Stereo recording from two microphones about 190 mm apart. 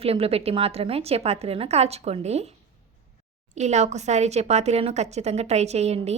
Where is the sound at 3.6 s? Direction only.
35° right (ahead or behind).